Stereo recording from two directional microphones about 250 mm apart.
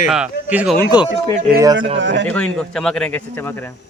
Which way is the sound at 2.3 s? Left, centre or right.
Centre.